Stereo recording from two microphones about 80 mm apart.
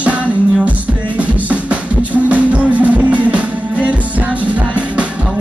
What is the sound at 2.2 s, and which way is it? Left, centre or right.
Music, centre.